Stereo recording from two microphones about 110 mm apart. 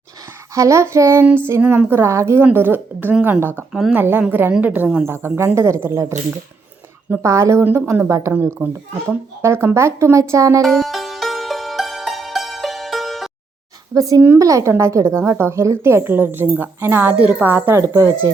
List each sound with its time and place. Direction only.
0.5 s a woman's voice: 25° right (ahead or behind); by 4.0 s 5° right (ahead or behind)
4.0 s a woman's voice: 20° right (ahead or behind)
7.2 s a woman's voice: 25° right (ahead or behind)
10.6 s music: centre (ahead or behind)
13.9 s a woman's voice: 30° right (ahead or behind)